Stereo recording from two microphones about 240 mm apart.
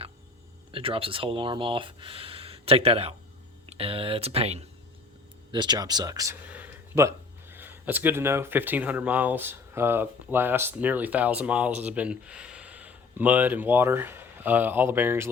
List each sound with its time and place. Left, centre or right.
0.7 s speech: right